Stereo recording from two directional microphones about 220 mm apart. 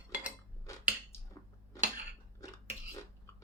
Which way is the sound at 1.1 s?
10° left (ahead or behind).